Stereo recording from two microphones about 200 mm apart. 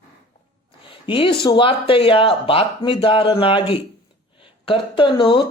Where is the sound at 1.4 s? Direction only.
25° left (ahead or behind).